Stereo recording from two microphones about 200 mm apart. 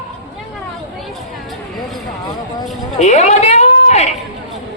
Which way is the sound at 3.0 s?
35° left (ahead or behind).